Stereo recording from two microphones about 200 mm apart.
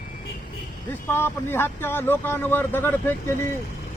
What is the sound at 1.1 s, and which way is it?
Speech, 10° left (ahead or behind).